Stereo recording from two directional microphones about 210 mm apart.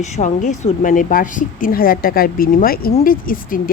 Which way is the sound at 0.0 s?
35° left (ahead or behind).